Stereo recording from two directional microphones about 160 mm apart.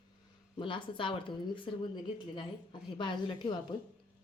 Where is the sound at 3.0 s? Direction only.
30° left (ahead or behind).